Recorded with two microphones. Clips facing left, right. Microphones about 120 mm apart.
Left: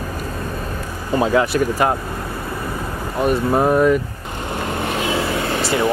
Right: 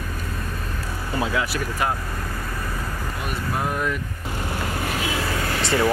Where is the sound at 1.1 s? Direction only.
45° left (ahead or behind).